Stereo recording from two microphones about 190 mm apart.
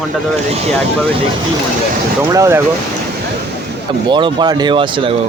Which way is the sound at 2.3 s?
15° right (ahead or behind).